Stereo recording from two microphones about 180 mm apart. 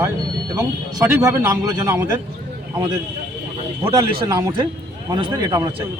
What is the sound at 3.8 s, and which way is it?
Speech, 20° right (ahead or behind).